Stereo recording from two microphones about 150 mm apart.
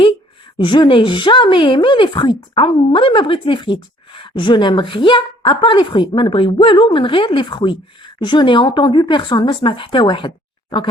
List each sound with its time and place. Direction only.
0.6 s speech: 35° left (ahead or behind)